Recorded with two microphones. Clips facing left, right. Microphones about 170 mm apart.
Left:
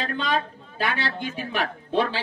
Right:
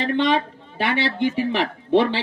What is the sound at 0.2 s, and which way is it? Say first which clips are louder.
A man's voice: right 6 dB; 75° right (ahead or behind).